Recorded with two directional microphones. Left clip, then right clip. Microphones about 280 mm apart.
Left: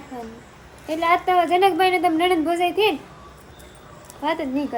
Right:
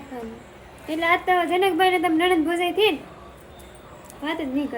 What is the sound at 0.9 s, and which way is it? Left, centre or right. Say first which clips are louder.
Speech: left 1 dB; centre.